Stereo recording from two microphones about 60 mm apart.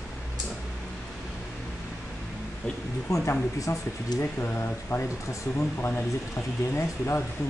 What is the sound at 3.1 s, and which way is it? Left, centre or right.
Speech, left.